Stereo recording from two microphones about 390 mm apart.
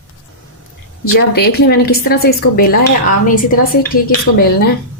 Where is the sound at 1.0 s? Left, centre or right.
Left.